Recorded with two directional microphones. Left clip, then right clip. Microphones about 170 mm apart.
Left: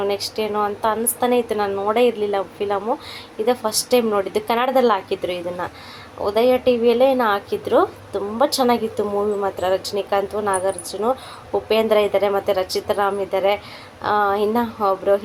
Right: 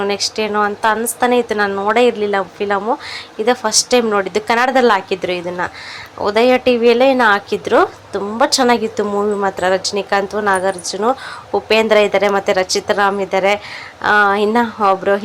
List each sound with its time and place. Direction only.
0.0 s a woman's voice: 15° right (ahead or behind)